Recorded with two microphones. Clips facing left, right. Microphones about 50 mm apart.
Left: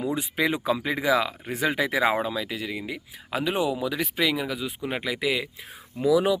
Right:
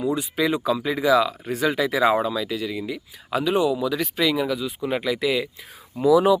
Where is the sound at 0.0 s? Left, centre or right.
Left.